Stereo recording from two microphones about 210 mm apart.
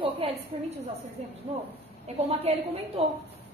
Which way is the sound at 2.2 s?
30° right (ahead or behind).